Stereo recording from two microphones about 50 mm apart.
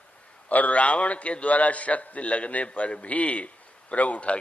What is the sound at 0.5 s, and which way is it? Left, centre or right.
A man's voice, left.